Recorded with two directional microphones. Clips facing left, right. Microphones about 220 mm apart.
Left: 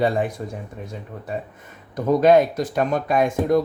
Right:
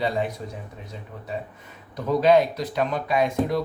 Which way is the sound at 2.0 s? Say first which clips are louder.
Left 3 dB; 50° left (ahead or behind).